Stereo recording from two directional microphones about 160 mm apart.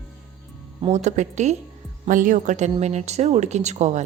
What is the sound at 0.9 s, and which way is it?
Speech, 45° right (ahead or behind).